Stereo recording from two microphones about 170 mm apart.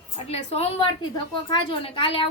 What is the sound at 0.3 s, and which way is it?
A woman's voice, 35° left (ahead or behind).